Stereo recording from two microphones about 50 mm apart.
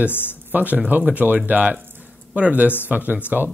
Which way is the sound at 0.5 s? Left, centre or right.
Right.